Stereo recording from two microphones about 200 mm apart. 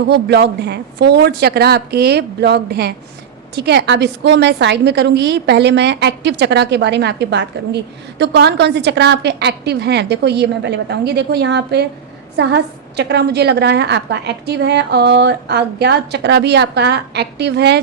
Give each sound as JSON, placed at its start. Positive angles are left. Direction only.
{"t": 0.0, "sound": "a woman's voice", "side_deg": -55}